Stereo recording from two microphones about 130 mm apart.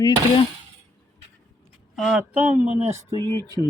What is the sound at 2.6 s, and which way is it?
Speech, 60° right (ahead or behind).